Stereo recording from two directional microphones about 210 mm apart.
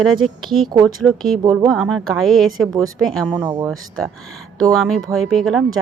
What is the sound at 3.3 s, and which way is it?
Speech, 15° right (ahead or behind).